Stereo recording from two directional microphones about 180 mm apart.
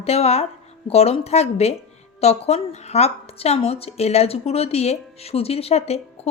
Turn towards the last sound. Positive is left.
turn(degrees=35)  # may be behind; listen again after turning